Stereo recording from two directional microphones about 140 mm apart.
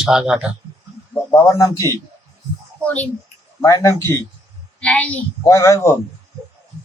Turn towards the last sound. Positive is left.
turn(degrees=15)  # may be behind; listen again after turning